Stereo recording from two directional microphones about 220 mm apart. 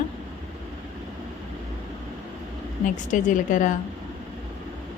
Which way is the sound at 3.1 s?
35° left (ahead or behind).